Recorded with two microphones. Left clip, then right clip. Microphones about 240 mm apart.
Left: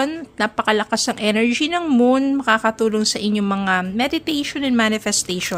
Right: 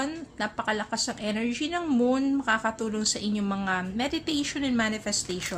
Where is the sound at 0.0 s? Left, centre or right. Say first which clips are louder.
Left 10 dB; left.